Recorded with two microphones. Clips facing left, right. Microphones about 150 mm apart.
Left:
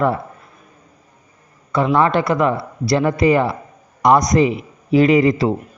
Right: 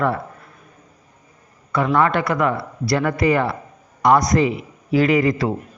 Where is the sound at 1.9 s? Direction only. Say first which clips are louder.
Left 2 dB; 25° left (ahead or behind).